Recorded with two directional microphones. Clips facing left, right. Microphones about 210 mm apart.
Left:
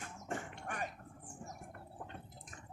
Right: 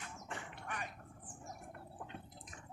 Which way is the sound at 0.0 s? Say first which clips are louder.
Left 5 dB; 45° left (ahead or behind).